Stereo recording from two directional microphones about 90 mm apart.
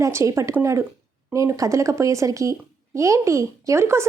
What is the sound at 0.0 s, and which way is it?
A woman's voice, 35° right (ahead or behind).